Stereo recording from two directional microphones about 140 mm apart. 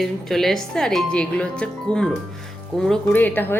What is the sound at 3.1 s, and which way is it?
Speech, 15° left (ahead or behind).